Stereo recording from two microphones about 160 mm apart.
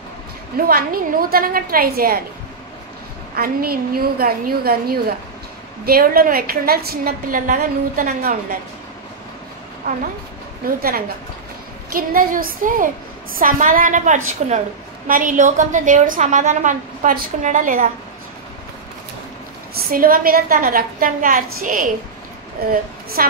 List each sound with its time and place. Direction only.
0.7 s a woman's voice: 65° right (ahead or behind)
3.3 s a woman's voice: 70° right (ahead or behind)
10.8 s a woman's voice: 70° right (ahead or behind)
19.7 s a woman's voice: 65° right (ahead or behind)
22.6 s a woman's voice: 70° right (ahead or behind)